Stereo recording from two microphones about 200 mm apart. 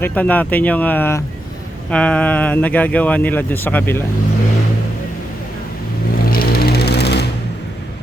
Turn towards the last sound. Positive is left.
turn(degrees=55)  # may be behind; listen again after turning